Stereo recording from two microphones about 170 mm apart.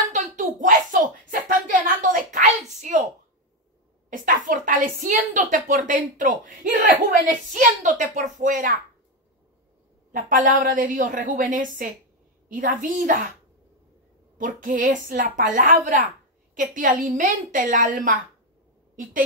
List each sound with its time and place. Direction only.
0.4 s a sound: 50° right (ahead or behind)
4.5 s a woman's voice: 50° right (ahead or behind)
10.3 s a woman's voice: 50° right (ahead or behind)
14.4 s a woman's voice: 50° right (ahead or behind)